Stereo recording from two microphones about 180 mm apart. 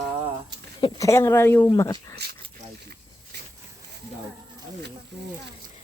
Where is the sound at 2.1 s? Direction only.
65° right (ahead or behind).